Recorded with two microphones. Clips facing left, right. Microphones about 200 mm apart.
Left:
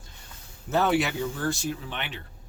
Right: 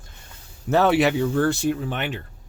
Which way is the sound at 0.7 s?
70° right (ahead or behind).